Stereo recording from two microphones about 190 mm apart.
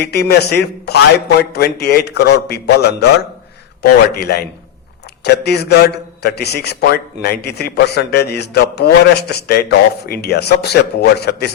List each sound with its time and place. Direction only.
0.0 s a man's voice: 60° left (ahead or behind)
4.1 s a man's voice: 55° left (ahead or behind)